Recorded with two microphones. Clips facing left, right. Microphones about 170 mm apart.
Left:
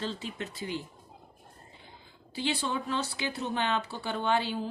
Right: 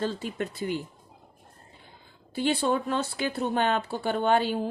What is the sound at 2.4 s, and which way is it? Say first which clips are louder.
A woman's voice: right 6 dB; 50° right (ahead or behind).